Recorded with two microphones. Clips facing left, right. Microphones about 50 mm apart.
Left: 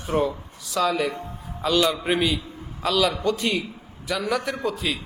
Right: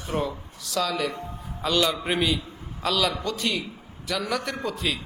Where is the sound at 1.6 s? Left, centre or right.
Centre.